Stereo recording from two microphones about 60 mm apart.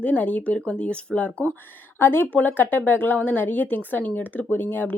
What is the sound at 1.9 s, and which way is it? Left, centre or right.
A woman's voice, left.